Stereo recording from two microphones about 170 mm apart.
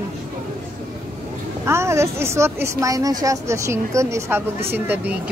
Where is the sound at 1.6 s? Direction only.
15° right (ahead or behind).